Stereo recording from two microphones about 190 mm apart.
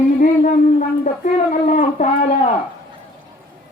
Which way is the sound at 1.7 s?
40° left (ahead or behind).